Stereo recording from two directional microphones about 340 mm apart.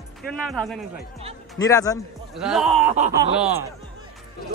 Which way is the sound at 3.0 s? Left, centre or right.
Centre.